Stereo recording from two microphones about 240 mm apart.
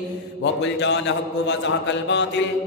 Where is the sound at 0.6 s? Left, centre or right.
Left.